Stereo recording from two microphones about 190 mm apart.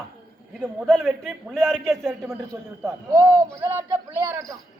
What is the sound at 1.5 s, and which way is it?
Speech, centre (ahead or behind).